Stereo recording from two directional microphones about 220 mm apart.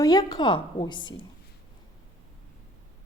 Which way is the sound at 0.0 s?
15° left (ahead or behind).